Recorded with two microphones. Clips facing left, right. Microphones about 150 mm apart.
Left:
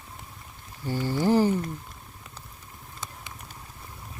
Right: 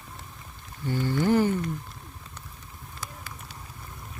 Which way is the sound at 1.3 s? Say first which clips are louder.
Left 1 dB; 35° left (ahead or behind).